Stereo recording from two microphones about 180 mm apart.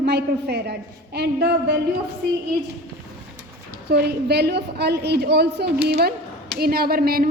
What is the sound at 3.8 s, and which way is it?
A woman's voice, 65° right (ahead or behind).